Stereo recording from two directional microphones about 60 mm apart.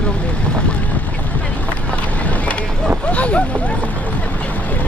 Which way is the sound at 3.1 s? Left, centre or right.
Left.